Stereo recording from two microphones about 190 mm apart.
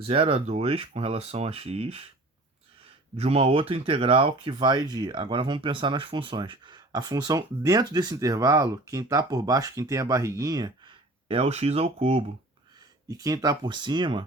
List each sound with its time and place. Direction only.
0.0 s speech: 30° right (ahead or behind)
3.2 s speech: 30° right (ahead or behind)
13.1 s speech: 20° right (ahead or behind)